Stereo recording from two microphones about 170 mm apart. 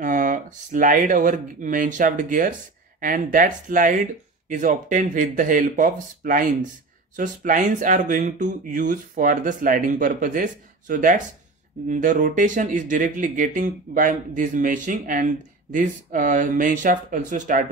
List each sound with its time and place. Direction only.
0.0 s speech: 50° right (ahead or behind)